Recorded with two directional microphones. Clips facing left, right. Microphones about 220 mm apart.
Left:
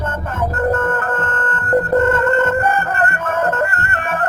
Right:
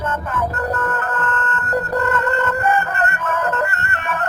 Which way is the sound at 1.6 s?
55° left (ahead or behind).